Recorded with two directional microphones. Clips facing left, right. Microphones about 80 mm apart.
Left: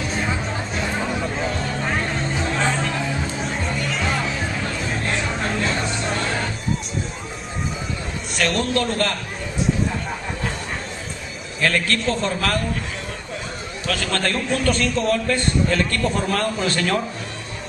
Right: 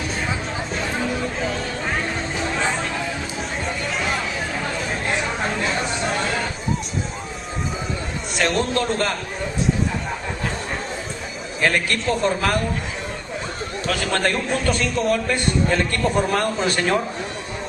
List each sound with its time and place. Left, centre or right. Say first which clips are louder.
0.2 s chatter: left 1 dB; centre
3.9 s music: even; centre
5.0 s chatter: right 1 dB; centre
8.5 s a man's voice: even; right
11.6 s a man's voice: even; centre
13.8 s a man's voice: right 2 dB; centre